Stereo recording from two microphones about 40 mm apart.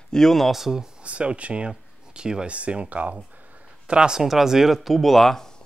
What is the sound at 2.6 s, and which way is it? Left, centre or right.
Speech, right.